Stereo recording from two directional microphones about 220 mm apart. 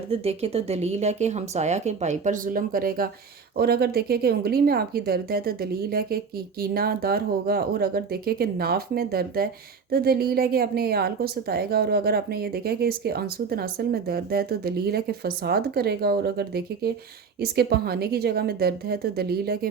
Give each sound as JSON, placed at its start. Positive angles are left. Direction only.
{"t": 0.1, "sound": "a woman's voice", "side_deg": -25}